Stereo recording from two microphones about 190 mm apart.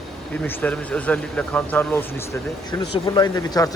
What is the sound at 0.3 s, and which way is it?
Speech, 10° left (ahead or behind).